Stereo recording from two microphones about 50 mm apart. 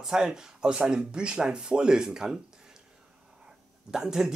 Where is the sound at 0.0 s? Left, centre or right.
Centre.